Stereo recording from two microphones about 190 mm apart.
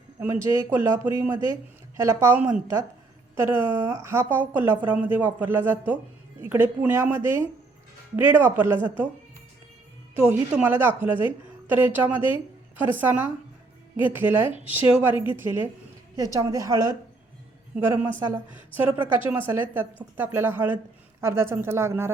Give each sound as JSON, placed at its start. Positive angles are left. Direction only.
{"t": 0.2, "sound": "a woman's voice", "side_deg": -15}
{"t": 10.2, "sound": "a woman's voice", "side_deg": -10}
{"t": 15.1, "sound": "a woman's voice", "side_deg": 25}
{"t": 15.4, "sound": "a woman's voice", "side_deg": -10}
{"t": 17.7, "sound": "a woman's voice", "side_deg": -10}